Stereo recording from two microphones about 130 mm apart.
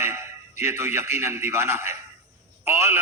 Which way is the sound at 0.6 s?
20° right (ahead or behind).